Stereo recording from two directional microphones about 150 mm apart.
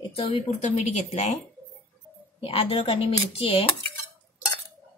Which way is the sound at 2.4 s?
40° left (ahead or behind).